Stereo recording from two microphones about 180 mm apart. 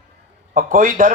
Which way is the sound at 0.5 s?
50° right (ahead or behind).